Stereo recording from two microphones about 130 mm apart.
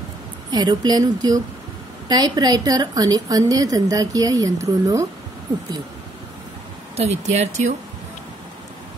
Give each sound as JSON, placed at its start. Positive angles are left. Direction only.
{"t": 0.5, "sound": "a woman's voice", "side_deg": -35}
{"t": 7.0, "sound": "speech", "side_deg": -55}